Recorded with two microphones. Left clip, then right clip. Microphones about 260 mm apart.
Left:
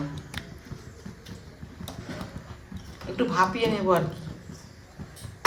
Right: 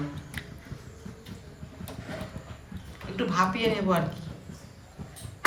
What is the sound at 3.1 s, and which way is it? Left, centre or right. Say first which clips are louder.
Speech: left 2 dB; left.